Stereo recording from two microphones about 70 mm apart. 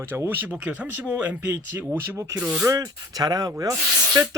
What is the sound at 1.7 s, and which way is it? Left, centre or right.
Speech, right.